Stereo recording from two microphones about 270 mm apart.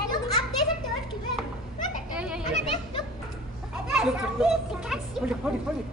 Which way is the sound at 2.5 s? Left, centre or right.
Left.